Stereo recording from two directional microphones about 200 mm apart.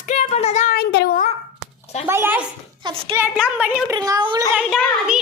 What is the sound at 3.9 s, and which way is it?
Speech, 20° right (ahead or behind).